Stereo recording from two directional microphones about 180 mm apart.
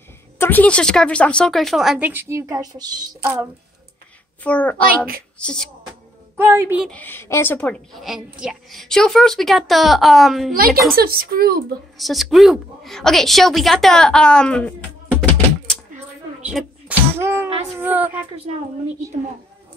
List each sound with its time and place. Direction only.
0.4 s a woman's voice: 10° left (ahead or behind); by 3.3 s 20° right (ahead or behind)
4.4 s a child's voice: 10° left (ahead or behind)
4.8 s a woman's voice: 55° right (ahead or behind)
5.4 s a woman's voice: 5° left (ahead or behind)
6.3 s a woman's voice: 15° right (ahead or behind)
6.8 s a woman's voice: 5° left (ahead or behind)
11.0 s a woman's voice: 55° right (ahead or behind)
12.0 s a woman's voice: centre (ahead or behind)
15.1 s typing: 5° left (ahead or behind)
16.5 s a sound: 10° right (ahead or behind)
17.7 s speech: 10° right (ahead or behind)
18.3 s a woman's voice: 35° right (ahead or behind)